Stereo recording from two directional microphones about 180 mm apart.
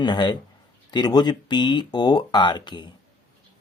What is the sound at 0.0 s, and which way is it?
Speech, 25° left (ahead or behind).